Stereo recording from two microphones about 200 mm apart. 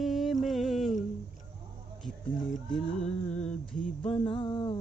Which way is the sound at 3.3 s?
35° left (ahead or behind).